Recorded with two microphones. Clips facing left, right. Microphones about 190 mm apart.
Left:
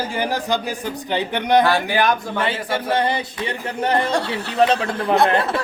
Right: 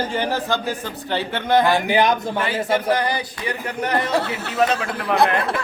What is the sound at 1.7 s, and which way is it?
Speech, 20° right (ahead or behind).